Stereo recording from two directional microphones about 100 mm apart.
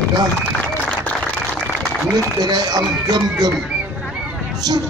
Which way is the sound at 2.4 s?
45° right (ahead or behind).